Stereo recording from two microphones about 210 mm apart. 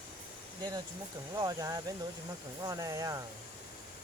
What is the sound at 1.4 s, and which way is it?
Speech, 15° right (ahead or behind).